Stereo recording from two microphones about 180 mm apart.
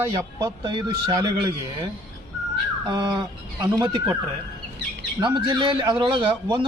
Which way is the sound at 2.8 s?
25° right (ahead or behind).